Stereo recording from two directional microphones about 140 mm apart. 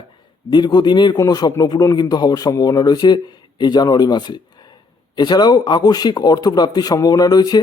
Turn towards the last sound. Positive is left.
turn(degrees=30)  # may be behind; listen again after turning